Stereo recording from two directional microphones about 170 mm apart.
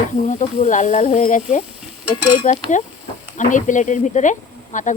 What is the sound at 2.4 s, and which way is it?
Speech, 45° left (ahead or behind).